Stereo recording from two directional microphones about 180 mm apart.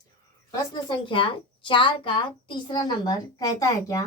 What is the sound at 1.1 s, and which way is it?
A child's voice, 30° left (ahead or behind).